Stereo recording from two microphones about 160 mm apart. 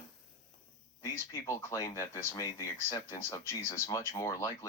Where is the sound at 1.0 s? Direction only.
20° left (ahead or behind).